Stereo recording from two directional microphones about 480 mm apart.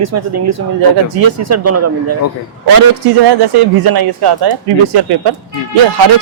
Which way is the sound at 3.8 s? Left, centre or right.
Right.